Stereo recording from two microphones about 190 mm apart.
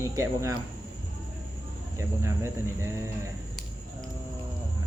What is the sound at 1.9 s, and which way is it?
Speech, 15° right (ahead or behind).